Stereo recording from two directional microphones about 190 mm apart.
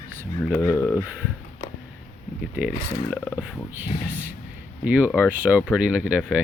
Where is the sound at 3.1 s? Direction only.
5° right (ahead or behind).